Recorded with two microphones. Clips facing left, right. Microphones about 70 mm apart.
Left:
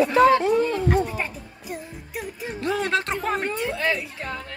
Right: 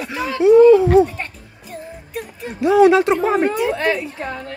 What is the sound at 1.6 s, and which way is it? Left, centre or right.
Music, centre.